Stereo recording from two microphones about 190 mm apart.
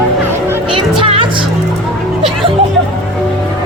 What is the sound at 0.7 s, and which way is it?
Music, 30° right (ahead or behind).